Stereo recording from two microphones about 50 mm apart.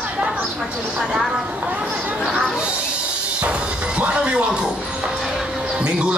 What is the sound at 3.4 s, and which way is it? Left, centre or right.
Music, right.